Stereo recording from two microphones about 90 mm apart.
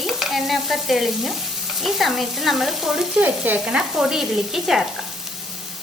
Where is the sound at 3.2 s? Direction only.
20° right (ahead or behind).